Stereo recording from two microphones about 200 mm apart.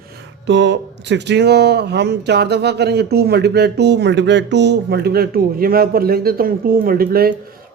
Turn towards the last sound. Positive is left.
turn(degrees=-50)  # may be behind; listen again after turning